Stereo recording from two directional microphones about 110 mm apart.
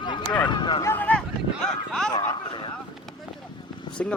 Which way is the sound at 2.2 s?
45° left (ahead or behind).